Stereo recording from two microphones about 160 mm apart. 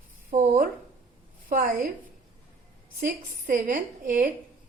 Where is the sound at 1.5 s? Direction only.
65° right (ahead or behind).